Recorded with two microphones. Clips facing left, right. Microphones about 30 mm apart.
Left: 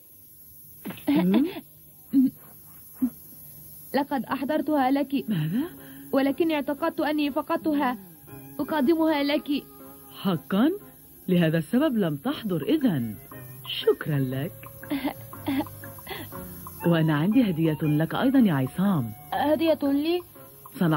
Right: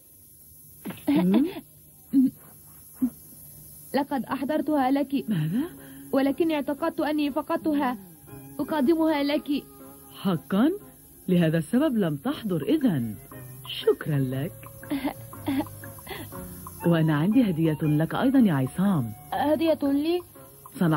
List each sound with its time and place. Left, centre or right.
0.9 s a sound: centre
3.9 s speech: centre
7.4 s music: centre
8.6 s speech: centre
14.8 s music: centre
17.6 s speech: centre
20.6 s music: centre